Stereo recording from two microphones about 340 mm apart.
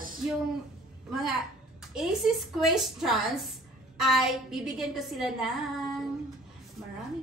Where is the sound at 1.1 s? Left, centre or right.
Centre.